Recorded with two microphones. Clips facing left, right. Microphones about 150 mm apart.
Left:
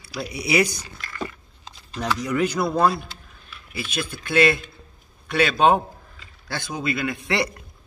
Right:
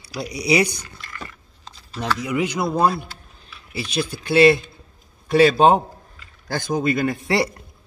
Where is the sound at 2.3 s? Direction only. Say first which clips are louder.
Left 1 dB; 15° right (ahead or behind).